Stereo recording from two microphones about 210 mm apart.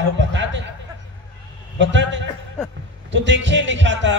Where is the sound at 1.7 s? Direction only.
60° right (ahead or behind).